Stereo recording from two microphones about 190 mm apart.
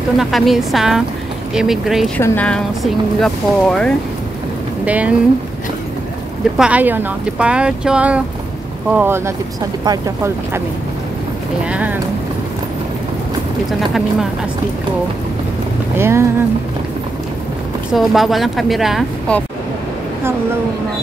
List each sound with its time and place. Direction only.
0.2 s speech: centre (ahead or behind)
2.1 s speech: 10° left (ahead or behind)
4.8 s speech: 5° right (ahead or behind)
6.6 s speech: 10° right (ahead or behind)
11.7 s speech: 10° right (ahead or behind)
13.7 s speech: centre (ahead or behind)
16.0 s speech: 15° right (ahead or behind)
17.9 s speech: centre (ahead or behind)